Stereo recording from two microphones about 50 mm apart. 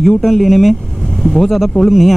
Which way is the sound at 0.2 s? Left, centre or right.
Centre.